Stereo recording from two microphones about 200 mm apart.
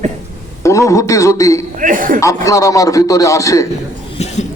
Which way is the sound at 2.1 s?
15° left (ahead or behind).